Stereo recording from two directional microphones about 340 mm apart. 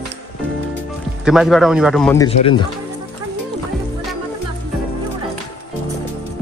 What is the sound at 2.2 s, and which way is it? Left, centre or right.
Speech, centre.